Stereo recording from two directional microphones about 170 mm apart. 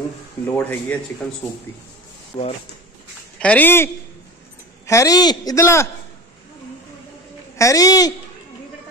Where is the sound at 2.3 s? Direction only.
30° left (ahead or behind).